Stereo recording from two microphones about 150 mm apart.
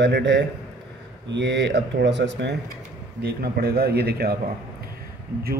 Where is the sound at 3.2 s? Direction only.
90° right.